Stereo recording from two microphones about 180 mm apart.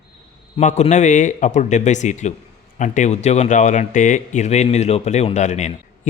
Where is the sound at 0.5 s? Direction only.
40° left (ahead or behind).